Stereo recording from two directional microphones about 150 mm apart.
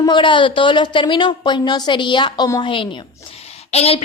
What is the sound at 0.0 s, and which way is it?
A woman's voice, 30° left (ahead or behind).